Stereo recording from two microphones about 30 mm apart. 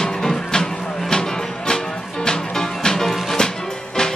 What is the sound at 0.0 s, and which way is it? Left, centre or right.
Music, centre.